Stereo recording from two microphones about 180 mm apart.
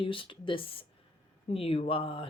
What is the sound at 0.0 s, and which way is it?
Speech, 30° left (ahead or behind).